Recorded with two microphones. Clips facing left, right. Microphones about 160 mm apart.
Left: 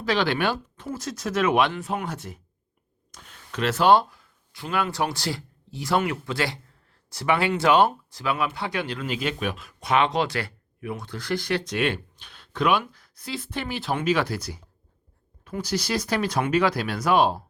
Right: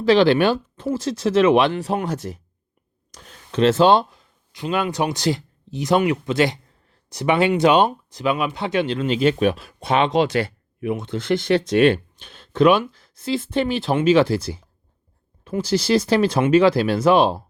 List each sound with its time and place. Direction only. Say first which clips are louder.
0.0 s speech: right 9 dB; 30° right (ahead or behind)
2.1 s speech: right 9 dB; 90° right
3.1 s speech: right 4 dB; 25° right (ahead or behind)